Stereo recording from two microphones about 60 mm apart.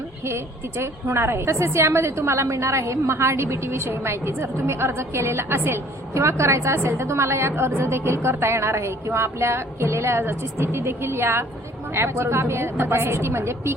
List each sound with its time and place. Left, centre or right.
0.3 s a woman's voice: right